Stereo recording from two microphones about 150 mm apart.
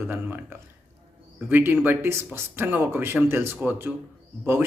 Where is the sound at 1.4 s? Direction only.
15° right (ahead or behind).